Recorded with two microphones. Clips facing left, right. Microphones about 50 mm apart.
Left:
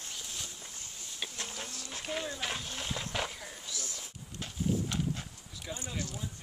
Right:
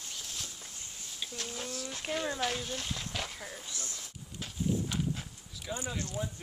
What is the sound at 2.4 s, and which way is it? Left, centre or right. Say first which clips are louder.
Speech: right 3 dB; centre.